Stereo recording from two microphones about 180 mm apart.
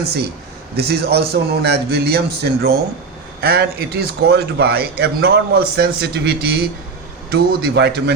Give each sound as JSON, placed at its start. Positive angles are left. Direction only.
{"t": 0.0, "sound": "speech", "side_deg": -65}